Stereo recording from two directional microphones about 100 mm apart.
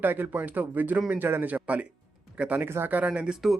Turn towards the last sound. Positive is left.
turn(degrees=-5)  # may be behind; listen again after turning